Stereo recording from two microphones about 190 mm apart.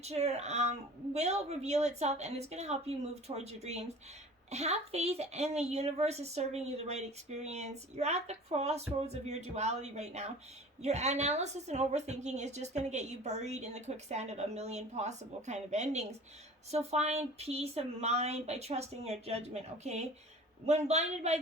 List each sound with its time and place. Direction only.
0.0 s a woman's voice: 35° right (ahead or behind)